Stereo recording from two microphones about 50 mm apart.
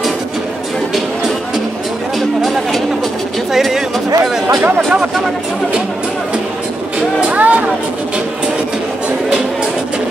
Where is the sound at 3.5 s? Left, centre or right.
Centre.